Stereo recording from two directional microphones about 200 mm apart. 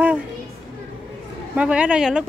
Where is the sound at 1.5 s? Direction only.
5° right (ahead or behind).